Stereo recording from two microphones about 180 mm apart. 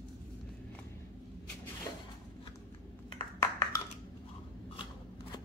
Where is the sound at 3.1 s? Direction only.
25° left (ahead or behind).